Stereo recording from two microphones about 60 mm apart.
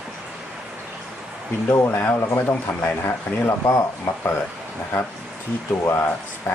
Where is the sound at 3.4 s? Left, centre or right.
Left.